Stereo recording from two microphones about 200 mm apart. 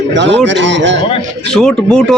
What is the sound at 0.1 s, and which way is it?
Speech, 60° right (ahead or behind).